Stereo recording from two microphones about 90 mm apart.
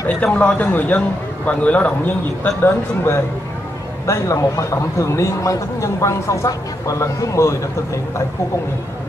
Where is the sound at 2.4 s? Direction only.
25° left (ahead or behind).